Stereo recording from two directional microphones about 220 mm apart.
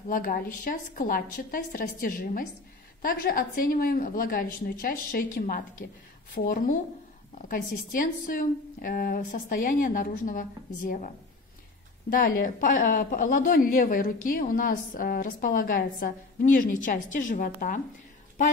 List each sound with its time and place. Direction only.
0.1 s a woman's voice: 40° left (ahead or behind)